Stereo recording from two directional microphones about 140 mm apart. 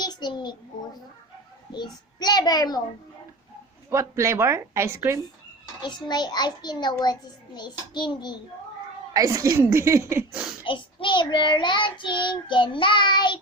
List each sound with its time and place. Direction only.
0.0 s a sound: 30° left (ahead or behind)
1.7 s a child's voice: 30° left (ahead or behind)
3.8 s a woman's voice: 20° right (ahead or behind)
5.8 s child singing: 30° left (ahead or behind)
9.1 s a woman's voice: 25° right (ahead or behind)
10.6 s child singing: 35° left (ahead or behind)